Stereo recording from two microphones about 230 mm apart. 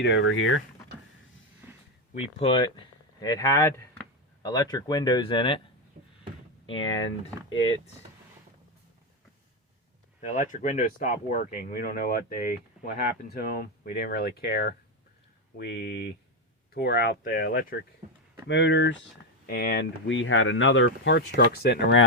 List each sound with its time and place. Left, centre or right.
0.0 s speech: left
2.2 s speech: left
6.7 s speech: left
10.2 s speech: left
18.0 s speech: right
18.4 s speech: left
19.5 s speech: left